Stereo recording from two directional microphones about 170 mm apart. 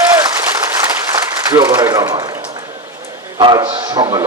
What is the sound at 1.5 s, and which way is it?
A man's voice, 15° right (ahead or behind).